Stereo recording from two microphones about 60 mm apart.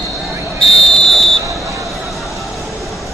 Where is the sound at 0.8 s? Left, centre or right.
Centre.